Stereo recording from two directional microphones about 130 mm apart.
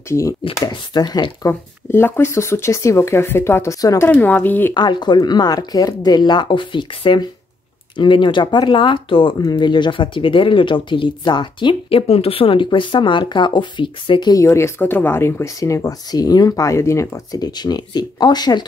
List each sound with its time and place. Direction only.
0.1 s speech: 20° left (ahead or behind)
1.5 s speech: 15° left (ahead or behind)
4.1 s speech: 15° left (ahead or behind)
4.7 s speech: 35° left (ahead or behind)
12.1 s speech: 50° left (ahead or behind)
14.4 s speech: 20° left (ahead or behind)